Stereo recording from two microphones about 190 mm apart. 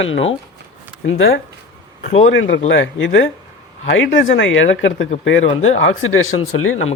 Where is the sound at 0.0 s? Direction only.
90° left.